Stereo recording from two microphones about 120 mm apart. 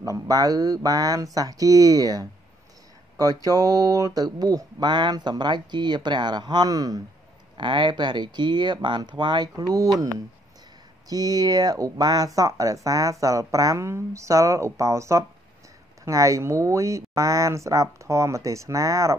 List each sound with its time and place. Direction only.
0.0 s speech: 30° right (ahead or behind)
11.1 s speech: 30° right (ahead or behind)